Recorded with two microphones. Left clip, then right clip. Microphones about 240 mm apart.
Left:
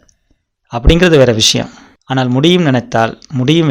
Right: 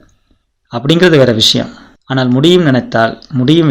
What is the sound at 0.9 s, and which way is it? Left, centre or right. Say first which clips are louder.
Speech: right 1 dB; left.